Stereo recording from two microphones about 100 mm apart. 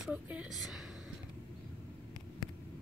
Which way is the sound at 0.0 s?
10° right (ahead or behind).